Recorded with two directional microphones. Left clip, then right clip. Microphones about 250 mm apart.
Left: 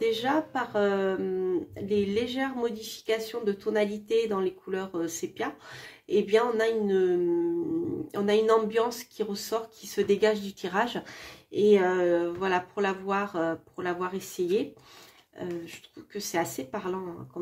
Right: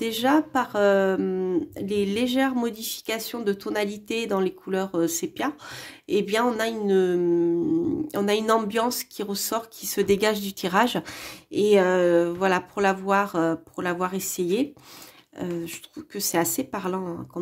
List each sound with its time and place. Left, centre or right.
0.0 s speech: right